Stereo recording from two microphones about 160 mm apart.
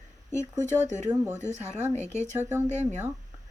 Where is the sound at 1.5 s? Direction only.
45° right (ahead or behind).